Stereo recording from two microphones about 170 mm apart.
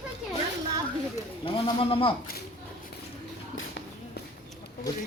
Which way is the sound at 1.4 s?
30° left (ahead or behind).